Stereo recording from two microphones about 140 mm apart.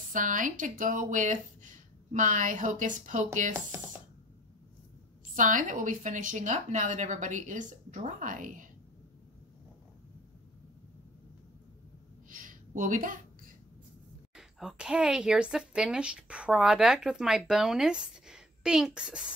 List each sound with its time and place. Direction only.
0.1 s a woman's voice: 70° right (ahead or behind)
5.3 s a woman's voice: 70° right (ahead or behind)
12.3 s a sound: 70° right (ahead or behind)
14.3 s a woman's voice: 5° right (ahead or behind)